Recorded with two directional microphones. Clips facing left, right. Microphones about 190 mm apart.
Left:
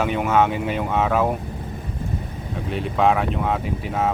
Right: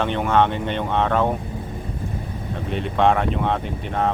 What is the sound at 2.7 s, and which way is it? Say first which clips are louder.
Speech: even; centre (ahead or behind).